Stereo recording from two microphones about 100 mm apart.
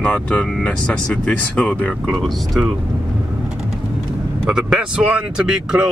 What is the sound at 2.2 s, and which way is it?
Speech, 5° right (ahead or behind).